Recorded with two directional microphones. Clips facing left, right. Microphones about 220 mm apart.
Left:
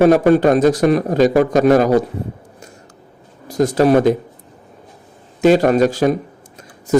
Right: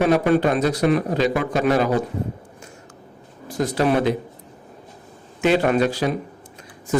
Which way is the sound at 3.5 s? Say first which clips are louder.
Left 7 dB; 45° left (ahead or behind).